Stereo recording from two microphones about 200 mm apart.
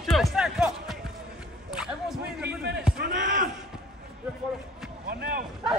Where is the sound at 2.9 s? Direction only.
40° right (ahead or behind).